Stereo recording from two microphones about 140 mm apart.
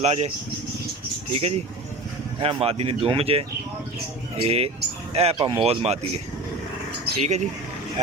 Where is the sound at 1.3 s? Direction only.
45° right (ahead or behind).